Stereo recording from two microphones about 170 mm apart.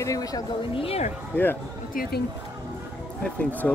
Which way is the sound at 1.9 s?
55° left (ahead or behind).